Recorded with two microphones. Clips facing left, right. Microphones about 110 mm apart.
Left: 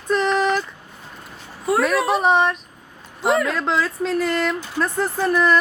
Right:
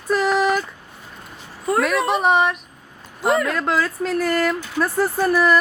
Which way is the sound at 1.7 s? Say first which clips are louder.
Left 1 dB; centre (ahead or behind).